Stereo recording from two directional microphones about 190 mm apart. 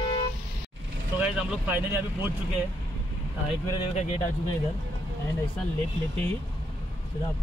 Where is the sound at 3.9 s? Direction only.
35° left (ahead or behind).